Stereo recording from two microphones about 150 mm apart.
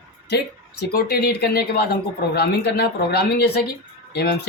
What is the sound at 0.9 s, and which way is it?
Speech, 90° left.